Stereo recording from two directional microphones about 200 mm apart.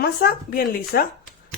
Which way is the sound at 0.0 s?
50° left (ahead or behind).